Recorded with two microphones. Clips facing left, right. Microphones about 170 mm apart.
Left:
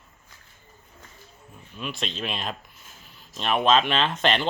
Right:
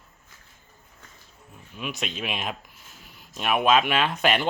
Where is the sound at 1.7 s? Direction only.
10° right (ahead or behind).